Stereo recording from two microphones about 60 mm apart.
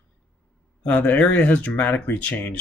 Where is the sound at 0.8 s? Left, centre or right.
Left.